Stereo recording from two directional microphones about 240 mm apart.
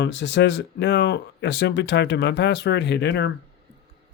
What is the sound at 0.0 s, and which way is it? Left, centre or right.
Speech, left.